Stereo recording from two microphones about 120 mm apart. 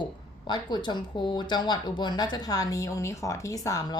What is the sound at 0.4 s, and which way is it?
Speech, 40° left (ahead or behind).